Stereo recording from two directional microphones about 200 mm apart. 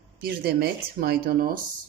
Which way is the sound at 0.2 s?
50° right (ahead or behind).